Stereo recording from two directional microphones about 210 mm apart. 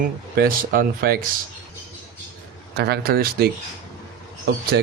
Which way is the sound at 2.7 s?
50° right (ahead or behind).